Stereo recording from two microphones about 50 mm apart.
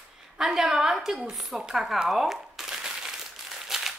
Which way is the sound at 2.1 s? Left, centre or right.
Centre.